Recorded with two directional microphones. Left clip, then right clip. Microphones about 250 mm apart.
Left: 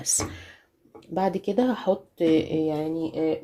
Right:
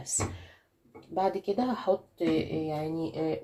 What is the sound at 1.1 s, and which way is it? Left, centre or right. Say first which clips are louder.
Speech: left 4 dB; left.